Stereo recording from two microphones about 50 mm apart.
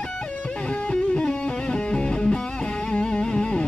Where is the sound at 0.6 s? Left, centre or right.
Left.